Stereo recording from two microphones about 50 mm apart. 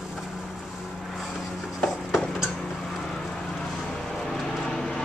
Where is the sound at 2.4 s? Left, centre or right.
Centre.